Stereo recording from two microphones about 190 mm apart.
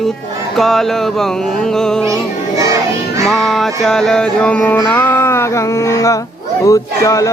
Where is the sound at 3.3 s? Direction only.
Centre (ahead or behind); by 6.2 s 15° left (ahead or behind).